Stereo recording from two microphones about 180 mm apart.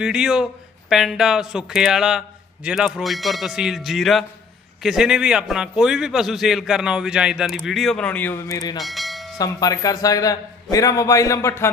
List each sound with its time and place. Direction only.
0.0 s a man's voice: 5° right (ahead or behind); by 8.8 s 20° left (ahead or behind)
8.8 s bell: centre (ahead or behind)
9.4 s a man's voice: 20° left (ahead or behind)